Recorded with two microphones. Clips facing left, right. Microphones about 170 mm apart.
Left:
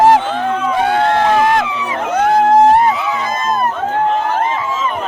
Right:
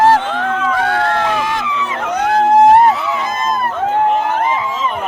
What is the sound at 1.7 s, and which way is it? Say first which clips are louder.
Speech: even; 15° left (ahead or behind).